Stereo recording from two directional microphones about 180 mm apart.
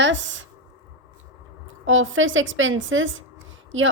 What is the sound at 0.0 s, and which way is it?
Speech, 90° right.